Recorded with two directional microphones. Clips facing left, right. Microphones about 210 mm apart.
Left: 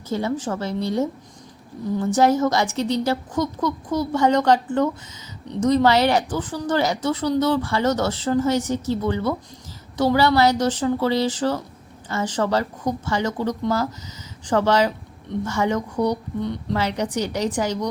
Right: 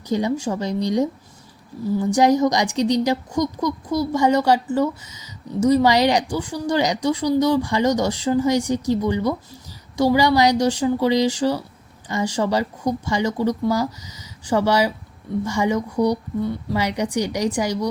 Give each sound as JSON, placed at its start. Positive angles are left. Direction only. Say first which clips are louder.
{"t": 0.1, "sound": "a woman's voice", "louder": "right 3 dB", "side_deg": -15}